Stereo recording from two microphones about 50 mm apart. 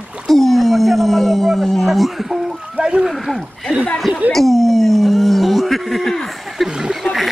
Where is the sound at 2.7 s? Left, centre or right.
Right.